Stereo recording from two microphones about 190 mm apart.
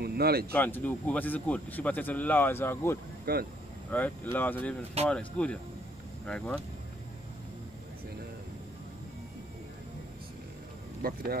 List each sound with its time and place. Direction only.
0.0 s a sound: 55° right (ahead or behind)
0.5 s speech: 10° left (ahead or behind)
3.3 s speech: 50° right (ahead or behind)
3.9 s speech: 10° left (ahead or behind)
11.0 s music: 50° right (ahead or behind)